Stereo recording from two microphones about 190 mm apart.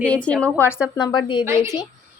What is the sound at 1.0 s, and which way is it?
Speech, 25° left (ahead or behind).